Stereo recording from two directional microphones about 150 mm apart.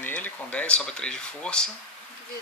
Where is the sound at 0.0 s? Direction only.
10° left (ahead or behind).